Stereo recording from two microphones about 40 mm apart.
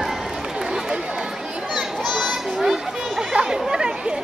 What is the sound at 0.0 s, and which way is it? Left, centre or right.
Run, centre.